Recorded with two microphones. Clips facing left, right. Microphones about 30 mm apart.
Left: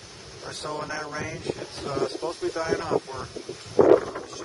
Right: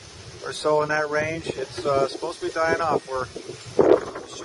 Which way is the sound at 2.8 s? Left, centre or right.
Centre.